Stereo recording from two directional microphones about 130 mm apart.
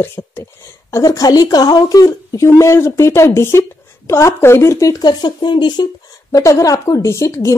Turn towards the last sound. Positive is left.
turn(degrees=25)  # may be behind; listen again after turning